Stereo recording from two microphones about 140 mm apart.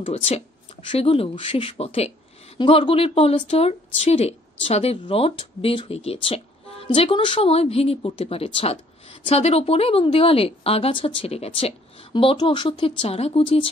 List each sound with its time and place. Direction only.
0.0 s a woman's voice: 45° left (ahead or behind)
12.1 s speech: 35° left (ahead or behind)